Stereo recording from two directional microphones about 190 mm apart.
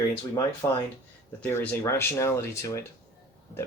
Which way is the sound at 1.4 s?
10° left (ahead or behind).